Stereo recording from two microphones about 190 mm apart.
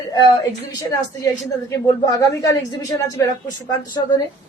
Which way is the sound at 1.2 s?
15° left (ahead or behind).